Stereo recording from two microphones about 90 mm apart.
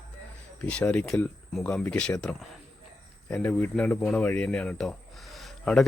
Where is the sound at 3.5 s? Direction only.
20° left (ahead or behind).